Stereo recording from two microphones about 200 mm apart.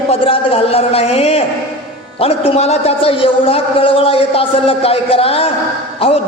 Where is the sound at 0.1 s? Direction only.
30° left (ahead or behind).